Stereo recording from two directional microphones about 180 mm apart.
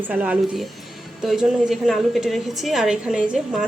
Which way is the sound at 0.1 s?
5° right (ahead or behind).